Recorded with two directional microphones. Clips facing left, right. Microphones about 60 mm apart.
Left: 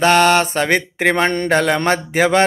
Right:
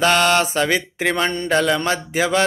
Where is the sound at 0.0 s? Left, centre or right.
Left.